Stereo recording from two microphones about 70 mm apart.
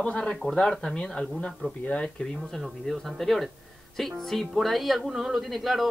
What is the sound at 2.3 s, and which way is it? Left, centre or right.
Speech, centre.